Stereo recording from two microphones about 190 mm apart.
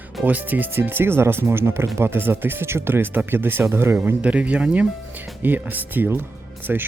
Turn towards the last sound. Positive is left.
turn(degrees=-10)  # may be behind; listen again after turning